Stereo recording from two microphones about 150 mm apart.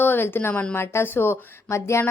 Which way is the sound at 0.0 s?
15° left (ahead or behind).